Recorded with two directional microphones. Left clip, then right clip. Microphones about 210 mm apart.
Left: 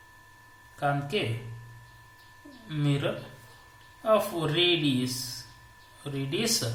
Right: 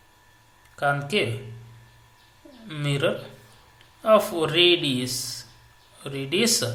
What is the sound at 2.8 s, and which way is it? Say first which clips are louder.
Speech: right 6 dB; 20° right (ahead or behind).